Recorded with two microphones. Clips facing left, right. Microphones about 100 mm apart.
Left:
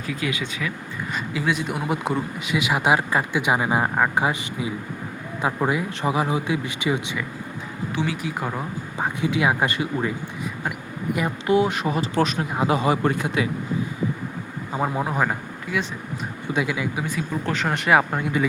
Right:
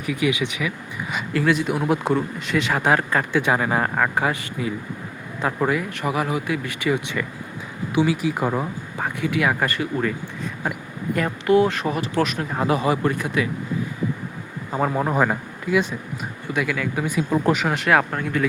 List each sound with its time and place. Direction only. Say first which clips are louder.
0.0 s speech: right 5 dB; 15° right (ahead or behind)
1.1 s speech: right 4 dB; centre (ahead or behind); by 7.2 s 20° left (ahead or behind)
7.9 s a man's voice: right 7 dB; 5° right (ahead or behind)
9.0 s speech: even; 20° left (ahead or behind)
14.7 s a man's voice: right 3 dB; centre (ahead or behind)
16.5 s speech: even; 20° left (ahead or behind)
17.7 s a man's voice: even; centre (ahead or behind)